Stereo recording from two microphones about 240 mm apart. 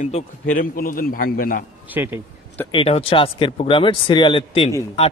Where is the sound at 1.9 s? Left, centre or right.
Centre.